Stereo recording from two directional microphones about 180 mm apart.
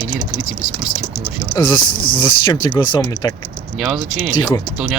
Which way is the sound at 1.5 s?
25° left (ahead or behind).